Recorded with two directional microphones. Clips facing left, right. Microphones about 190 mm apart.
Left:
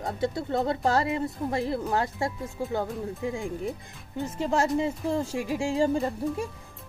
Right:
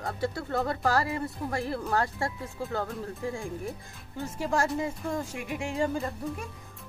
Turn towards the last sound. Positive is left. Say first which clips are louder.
# left 6 dB
turn(degrees=30)  # may be behind; listen again after turning